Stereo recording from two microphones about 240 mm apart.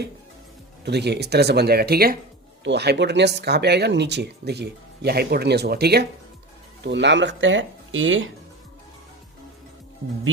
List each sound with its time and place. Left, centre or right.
0.9 s speech: right